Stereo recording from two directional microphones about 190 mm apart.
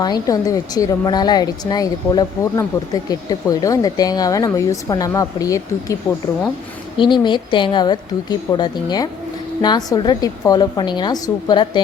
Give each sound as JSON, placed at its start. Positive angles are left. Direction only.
{"t": 0.0, "sound": "a woman's voice", "side_deg": 20}